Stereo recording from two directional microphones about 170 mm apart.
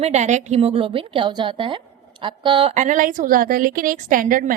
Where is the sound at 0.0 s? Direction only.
45° right (ahead or behind).